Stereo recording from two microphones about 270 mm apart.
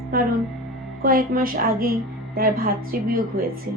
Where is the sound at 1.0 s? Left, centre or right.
Right.